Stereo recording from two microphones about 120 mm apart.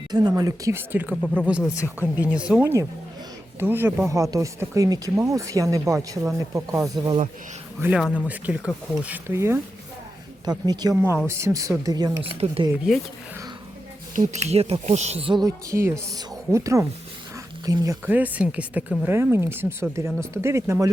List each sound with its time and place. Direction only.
0.1 s speech: 35° right (ahead or behind); by 1.1 s 15° right (ahead or behind)
1.1 s speech: 5° left (ahead or behind)
1.5 s speech: 10° right (ahead or behind); by 7.1 s 30° right (ahead or behind)
7.9 s speech: 10° right (ahead or behind)
9.3 s speech: 20° right (ahead or behind)
10.4 s speech: 35° right (ahead or behind)
10.9 s speech: 20° right (ahead or behind)
12.2 s speech: 50° right (ahead or behind)
12.7 s speech: 5° right (ahead or behind)
14.2 s speech: 75° right (ahead or behind)
15.4 s speech: 25° right (ahead or behind)
18.0 s speech: 15° right (ahead or behind)